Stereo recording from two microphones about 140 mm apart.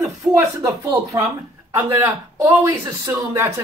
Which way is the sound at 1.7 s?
20° right (ahead or behind).